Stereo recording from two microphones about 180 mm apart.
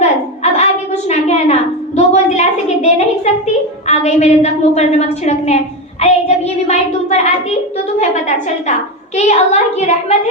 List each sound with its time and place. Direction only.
0.0 s a sound: 40° left (ahead or behind)
2.0 s a woman's voice: 40° left (ahead or behind)
9.1 s a woman's voice: 40° left (ahead or behind)